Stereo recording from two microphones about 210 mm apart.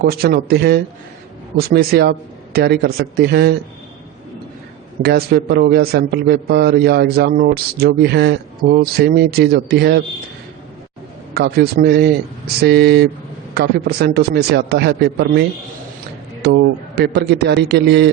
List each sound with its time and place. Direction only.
0.0 s a man's voice: 45° right (ahead or behind)
5.0 s a man's voice: 45° right (ahead or behind)
11.3 s a man's voice: 50° right (ahead or behind)